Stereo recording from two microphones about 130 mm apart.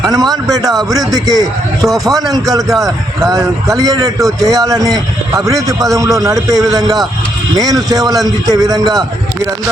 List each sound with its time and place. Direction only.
0.1 s a man's voice: 30° right (ahead or behind)